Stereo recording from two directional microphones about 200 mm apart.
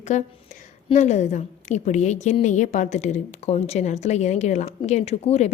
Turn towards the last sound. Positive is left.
turn(degrees=30)  # may be behind; listen again after turning